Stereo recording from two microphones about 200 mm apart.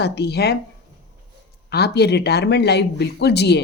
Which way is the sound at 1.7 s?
55° left (ahead or behind).